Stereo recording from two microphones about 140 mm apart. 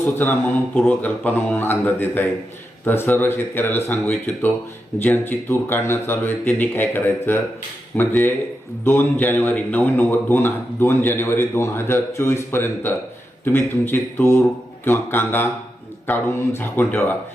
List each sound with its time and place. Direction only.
0.2 s a man's voice: 10° left (ahead or behind)